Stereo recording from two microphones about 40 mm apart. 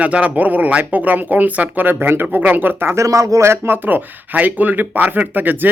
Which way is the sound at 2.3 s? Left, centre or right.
Right.